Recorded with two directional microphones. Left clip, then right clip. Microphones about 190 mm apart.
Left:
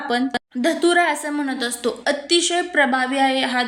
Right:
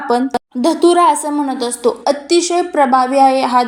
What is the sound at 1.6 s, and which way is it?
A woman's voice, 25° left (ahead or behind).